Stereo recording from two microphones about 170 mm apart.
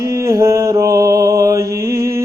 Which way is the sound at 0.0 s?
15° right (ahead or behind).